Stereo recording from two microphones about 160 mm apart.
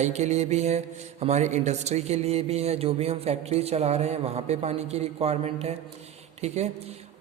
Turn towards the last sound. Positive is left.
turn(degrees=-45)  # may be behind; listen again after turning